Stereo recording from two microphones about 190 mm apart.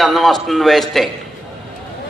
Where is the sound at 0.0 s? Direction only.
Centre (ahead or behind).